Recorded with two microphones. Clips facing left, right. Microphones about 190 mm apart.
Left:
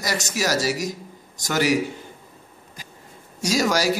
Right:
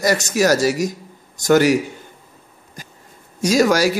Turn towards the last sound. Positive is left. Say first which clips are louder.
# right 6 dB
turn(degrees=-55)  # may be behind; listen again after turning